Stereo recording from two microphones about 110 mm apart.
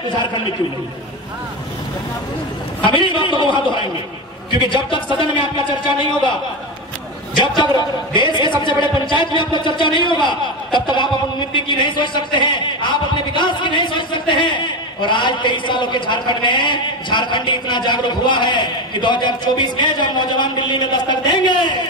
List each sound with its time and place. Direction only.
0.2 s a man's voice: 45° left (ahead or behind)
2.8 s a man's voice: 50° left (ahead or behind)
7.3 s a man's voice: 40° left (ahead or behind)